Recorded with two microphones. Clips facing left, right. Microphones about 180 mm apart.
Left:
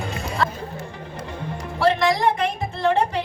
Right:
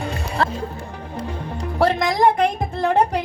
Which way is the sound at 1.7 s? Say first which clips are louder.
Right 1 dB; 50° right (ahead or behind).